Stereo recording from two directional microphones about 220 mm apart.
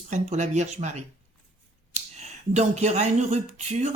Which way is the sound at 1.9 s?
30° right (ahead or behind).